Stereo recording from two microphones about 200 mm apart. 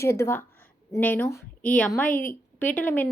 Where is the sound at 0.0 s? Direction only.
15° left (ahead or behind).